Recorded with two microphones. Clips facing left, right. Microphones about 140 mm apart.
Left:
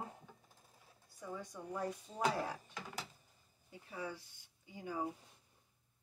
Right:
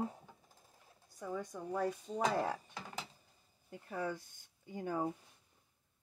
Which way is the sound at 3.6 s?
55° right (ahead or behind).